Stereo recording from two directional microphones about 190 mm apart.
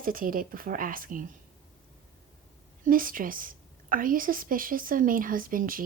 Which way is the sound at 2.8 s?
45° right (ahead or behind).